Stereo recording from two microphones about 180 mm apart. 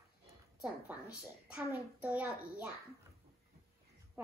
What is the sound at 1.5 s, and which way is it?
A child's voice, 10° right (ahead or behind).